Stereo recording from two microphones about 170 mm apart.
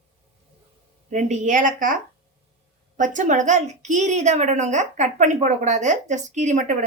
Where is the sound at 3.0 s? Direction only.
45° right (ahead or behind).